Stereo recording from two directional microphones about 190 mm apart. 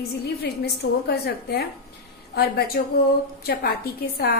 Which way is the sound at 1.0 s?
55° left (ahead or behind).